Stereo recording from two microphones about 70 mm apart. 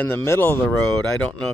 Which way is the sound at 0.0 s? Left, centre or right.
Left.